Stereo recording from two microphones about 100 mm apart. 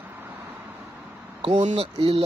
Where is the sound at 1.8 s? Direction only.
65° right (ahead or behind).